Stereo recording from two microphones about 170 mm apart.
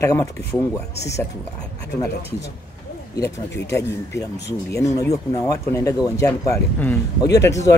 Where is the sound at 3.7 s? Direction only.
15° left (ahead or behind).